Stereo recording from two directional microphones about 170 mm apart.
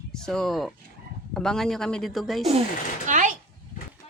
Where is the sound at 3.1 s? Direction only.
50° right (ahead or behind).